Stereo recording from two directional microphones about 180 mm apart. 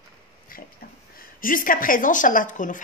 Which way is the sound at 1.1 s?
50° left (ahead or behind).